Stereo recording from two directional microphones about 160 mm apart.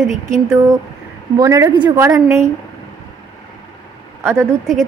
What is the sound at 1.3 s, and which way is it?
A woman's voice, 20° right (ahead or behind).